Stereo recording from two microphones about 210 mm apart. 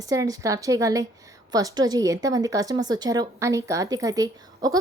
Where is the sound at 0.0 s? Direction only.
15° right (ahead or behind).